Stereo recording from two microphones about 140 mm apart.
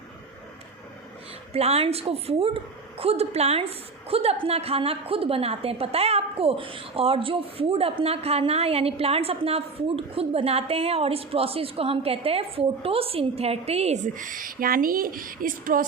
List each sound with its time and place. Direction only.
1.5 s a woman's voice: 45° right (ahead or behind); by 15.8 s 80° right